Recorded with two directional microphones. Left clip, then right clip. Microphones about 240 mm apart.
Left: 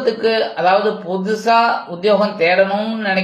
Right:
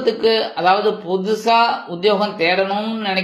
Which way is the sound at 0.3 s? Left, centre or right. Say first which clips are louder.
Left 2 dB; centre.